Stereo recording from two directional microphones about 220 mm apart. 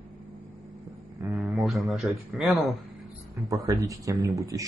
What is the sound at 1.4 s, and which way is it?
Speech, centre (ahead or behind).